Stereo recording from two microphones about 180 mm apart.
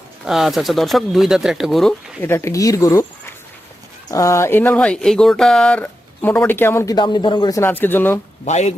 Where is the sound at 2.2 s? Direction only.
15° left (ahead or behind).